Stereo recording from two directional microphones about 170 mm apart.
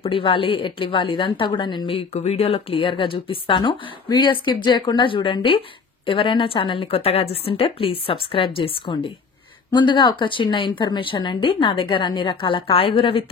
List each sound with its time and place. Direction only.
0.0 s a woman's voice: 30° left (ahead or behind)